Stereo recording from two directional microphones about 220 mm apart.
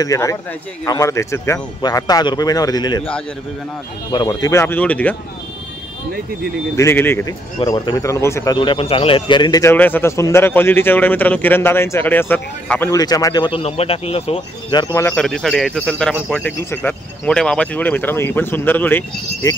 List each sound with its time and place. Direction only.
0.0 s a man's voice: 15° left (ahead or behind)
4.1 s a man's voice: 20° left (ahead or behind)
6.8 s a man's voice: 10° left (ahead or behind)
8.5 s a man's voice: 25° left (ahead or behind); by 19.5 s 10° left (ahead or behind)